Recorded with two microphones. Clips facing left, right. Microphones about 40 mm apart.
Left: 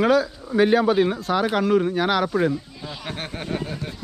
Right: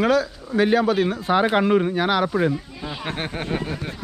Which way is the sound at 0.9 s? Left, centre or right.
Centre.